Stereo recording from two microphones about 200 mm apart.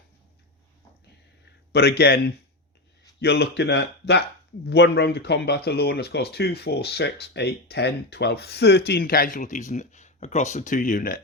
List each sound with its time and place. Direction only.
1.7 s speech: 55° left (ahead or behind)